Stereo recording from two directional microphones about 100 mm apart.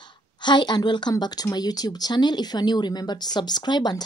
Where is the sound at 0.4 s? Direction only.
50° left (ahead or behind).